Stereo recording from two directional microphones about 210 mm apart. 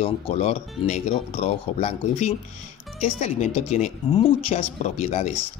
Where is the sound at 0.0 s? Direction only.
30° left (ahead or behind).